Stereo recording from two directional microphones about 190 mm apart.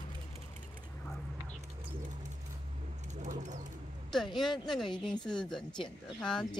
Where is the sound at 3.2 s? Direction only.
40° right (ahead or behind).